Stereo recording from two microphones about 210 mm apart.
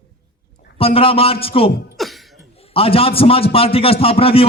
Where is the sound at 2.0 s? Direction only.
Centre (ahead or behind).